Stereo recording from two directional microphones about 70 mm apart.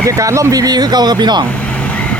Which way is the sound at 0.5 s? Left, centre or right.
Right.